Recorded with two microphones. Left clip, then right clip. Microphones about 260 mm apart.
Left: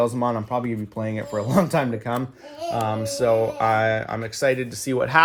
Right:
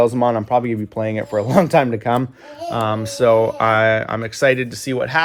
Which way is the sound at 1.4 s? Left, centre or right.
Centre.